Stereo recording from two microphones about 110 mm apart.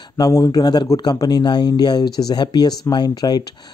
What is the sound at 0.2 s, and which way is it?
Speech, 35° left (ahead or behind).